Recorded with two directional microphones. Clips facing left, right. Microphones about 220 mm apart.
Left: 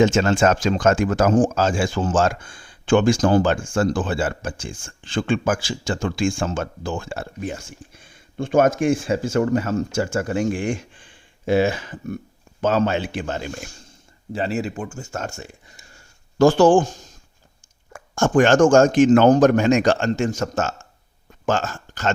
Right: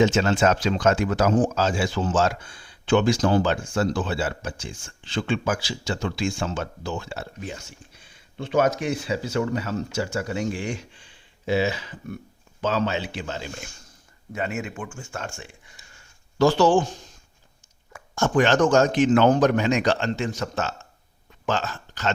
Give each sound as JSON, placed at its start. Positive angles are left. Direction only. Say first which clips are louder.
{"t": 0.0, "sound": "speech", "louder": "left 3 dB", "side_deg": 50}
{"t": 14.3, "sound": "speech", "louder": "left 5 dB", "side_deg": 35}